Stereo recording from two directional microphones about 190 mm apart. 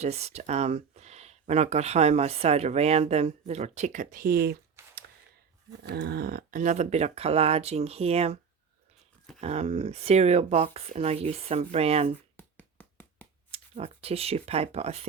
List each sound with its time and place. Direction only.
0.0 s speech: 35° right (ahead or behind)
9.4 s speech: 35° right (ahead or behind)
12.4 s a sound: 10° left (ahead or behind)
13.5 s speech: 30° right (ahead or behind)